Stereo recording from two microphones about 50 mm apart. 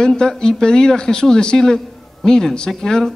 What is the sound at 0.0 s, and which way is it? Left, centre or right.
A man's voice, centre.